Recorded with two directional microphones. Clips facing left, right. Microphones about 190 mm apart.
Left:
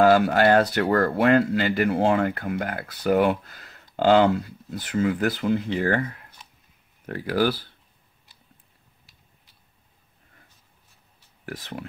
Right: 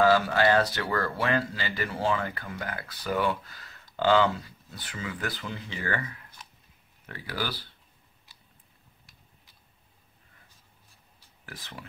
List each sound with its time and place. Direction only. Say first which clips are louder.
0.0 s speech: left 5 dB; 55° left (ahead or behind)
11.4 s speech: left 10 dB; 50° left (ahead or behind)